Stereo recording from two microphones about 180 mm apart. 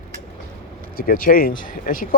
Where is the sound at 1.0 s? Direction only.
55° left (ahead or behind).